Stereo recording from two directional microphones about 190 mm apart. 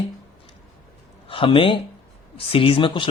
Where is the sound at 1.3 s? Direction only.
25° left (ahead or behind).